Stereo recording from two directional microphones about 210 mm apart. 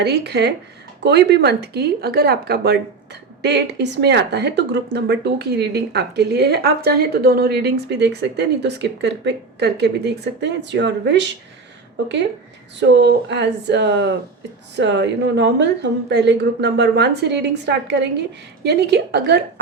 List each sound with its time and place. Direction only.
0.0 s speech: 55° right (ahead or behind)
12.8 s a woman's voice: 55° right (ahead or behind)